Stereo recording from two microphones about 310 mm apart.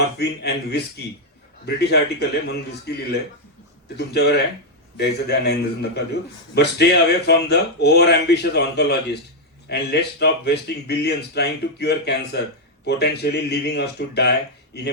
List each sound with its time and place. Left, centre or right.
0.2 s speech: left